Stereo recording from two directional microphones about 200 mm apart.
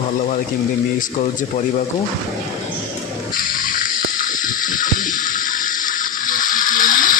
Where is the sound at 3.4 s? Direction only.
45° left (ahead or behind).